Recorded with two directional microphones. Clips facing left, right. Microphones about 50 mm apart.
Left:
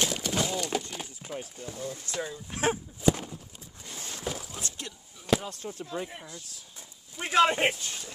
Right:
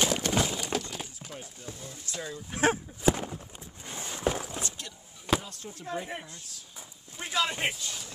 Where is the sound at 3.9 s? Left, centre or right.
Right.